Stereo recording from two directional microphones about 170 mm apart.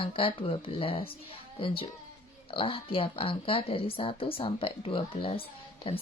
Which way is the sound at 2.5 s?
30° left (ahead or behind).